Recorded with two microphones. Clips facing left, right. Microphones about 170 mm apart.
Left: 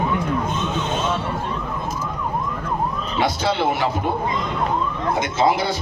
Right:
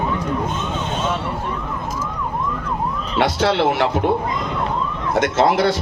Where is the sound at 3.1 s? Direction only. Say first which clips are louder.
Right 4 dB; 75° right (ahead or behind).